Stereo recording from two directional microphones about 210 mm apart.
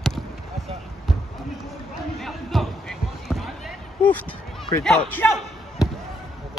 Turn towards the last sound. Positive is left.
turn(degrees=5)  # may be behind; listen again after turning